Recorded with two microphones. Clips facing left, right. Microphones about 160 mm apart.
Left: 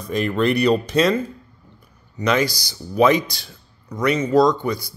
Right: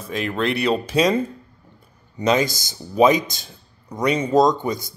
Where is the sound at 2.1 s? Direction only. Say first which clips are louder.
Right 1 dB; 25° right (ahead or behind).